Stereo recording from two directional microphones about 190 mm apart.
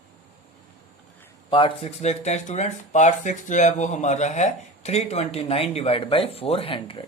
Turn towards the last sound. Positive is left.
turn(degrees=30)  # may be behind; listen again after turning